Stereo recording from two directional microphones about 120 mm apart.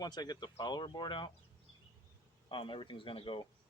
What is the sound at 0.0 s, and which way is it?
Speech, 35° left (ahead or behind).